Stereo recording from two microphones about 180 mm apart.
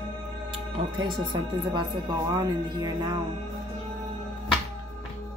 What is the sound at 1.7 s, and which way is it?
Speech, 25° right (ahead or behind).